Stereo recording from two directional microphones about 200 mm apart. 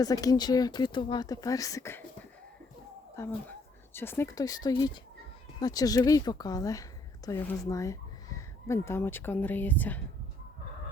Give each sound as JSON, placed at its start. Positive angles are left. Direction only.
{"t": 0.0, "sound": "speech", "side_deg": 20}
{"t": 3.2, "sound": "speech", "side_deg": 15}